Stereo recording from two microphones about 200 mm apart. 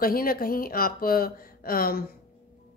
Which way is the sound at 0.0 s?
45° left (ahead or behind).